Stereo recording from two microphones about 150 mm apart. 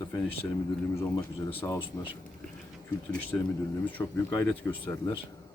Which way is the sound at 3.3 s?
10° left (ahead or behind).